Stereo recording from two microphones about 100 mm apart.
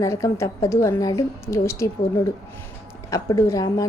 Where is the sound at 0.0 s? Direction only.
30° left (ahead or behind).